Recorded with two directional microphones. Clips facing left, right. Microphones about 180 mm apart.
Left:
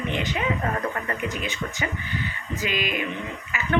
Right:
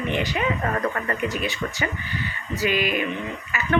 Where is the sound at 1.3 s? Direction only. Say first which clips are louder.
Right 3 dB; 20° left (ahead or behind).